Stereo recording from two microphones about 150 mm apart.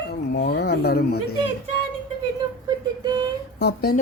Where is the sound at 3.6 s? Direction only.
85° left.